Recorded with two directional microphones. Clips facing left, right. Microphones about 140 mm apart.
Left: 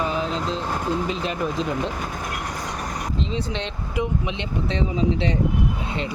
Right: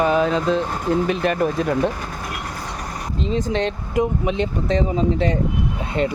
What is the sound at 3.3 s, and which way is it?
Speech, 45° right (ahead or behind).